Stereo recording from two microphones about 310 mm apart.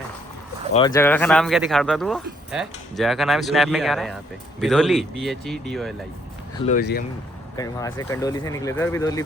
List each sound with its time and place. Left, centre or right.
0.7 s speech: centre
6.7 s speech: left
7.5 s speech: centre